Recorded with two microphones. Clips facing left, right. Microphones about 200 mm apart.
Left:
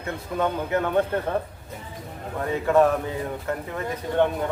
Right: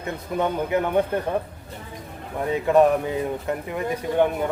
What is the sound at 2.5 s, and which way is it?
Speech, 15° right (ahead or behind).